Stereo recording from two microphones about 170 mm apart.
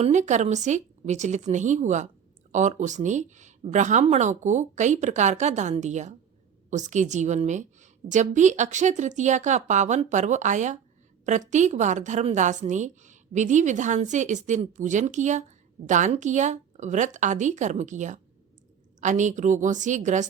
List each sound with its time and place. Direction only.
0.0 s a woman's voice: 45° right (ahead or behind)